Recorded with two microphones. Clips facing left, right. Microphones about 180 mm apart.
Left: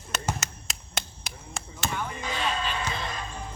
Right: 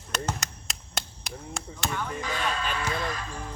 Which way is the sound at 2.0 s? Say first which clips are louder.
Right 1 dB; 20° left (ahead or behind).